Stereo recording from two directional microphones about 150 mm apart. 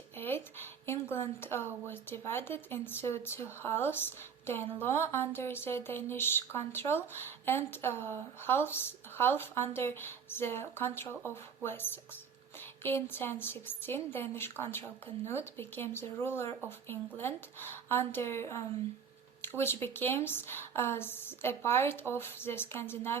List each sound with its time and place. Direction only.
0.2 s a woman's voice: 15° left (ahead or behind)